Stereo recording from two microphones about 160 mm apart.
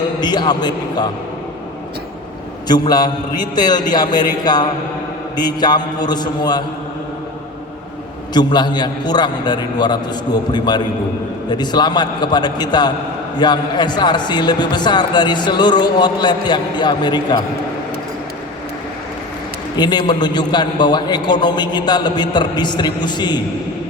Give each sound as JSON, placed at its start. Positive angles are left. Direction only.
{"t": 0.2, "sound": "speech", "side_deg": 25}
{"t": 2.6, "sound": "speech", "side_deg": 25}
{"t": 8.3, "sound": "speech", "side_deg": 25}
{"t": 19.7, "sound": "speech", "side_deg": 25}